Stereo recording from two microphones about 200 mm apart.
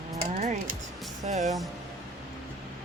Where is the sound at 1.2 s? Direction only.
35° right (ahead or behind).